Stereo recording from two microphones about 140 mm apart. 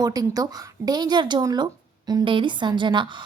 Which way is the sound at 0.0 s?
25° right (ahead or behind).